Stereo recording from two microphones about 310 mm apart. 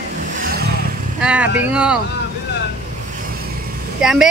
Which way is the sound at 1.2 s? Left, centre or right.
Centre.